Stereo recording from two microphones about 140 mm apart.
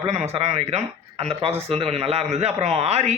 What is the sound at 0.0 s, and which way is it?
A man's voice, 50° right (ahead or behind).